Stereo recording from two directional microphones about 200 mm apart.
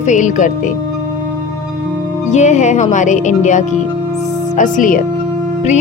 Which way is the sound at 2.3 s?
35° left (ahead or behind).